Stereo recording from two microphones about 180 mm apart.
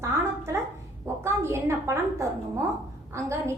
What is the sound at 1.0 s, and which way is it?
Chicken, 15° right (ahead or behind).